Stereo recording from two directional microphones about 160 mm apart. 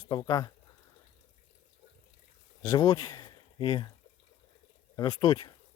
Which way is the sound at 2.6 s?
25° left (ahead or behind).